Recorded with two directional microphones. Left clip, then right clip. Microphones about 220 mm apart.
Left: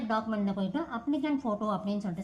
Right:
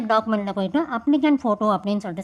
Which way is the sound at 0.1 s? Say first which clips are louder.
Right 11 dB; 35° right (ahead or behind).